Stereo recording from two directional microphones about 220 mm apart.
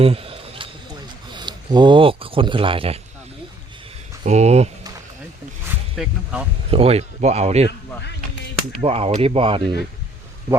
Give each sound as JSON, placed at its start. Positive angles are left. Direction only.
{"t": 0.0, "sound": "a sound", "side_deg": -25}
{"t": 1.3, "sound": "speech", "side_deg": -20}
{"t": 4.3, "sound": "speech", "side_deg": -30}
{"t": 5.6, "sound": "a sound", "side_deg": -5}
{"t": 6.7, "sound": "speech", "side_deg": -25}
{"t": 8.8, "sound": "speech", "side_deg": -25}